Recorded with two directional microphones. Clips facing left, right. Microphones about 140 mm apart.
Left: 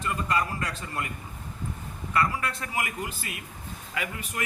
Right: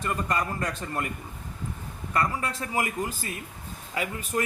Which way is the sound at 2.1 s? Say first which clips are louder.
Even; 35° right (ahead or behind).